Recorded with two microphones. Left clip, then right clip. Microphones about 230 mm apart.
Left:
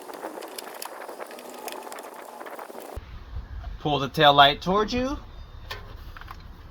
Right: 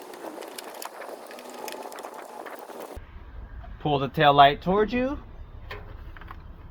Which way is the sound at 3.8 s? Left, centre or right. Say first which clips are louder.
Left 2 dB; centre.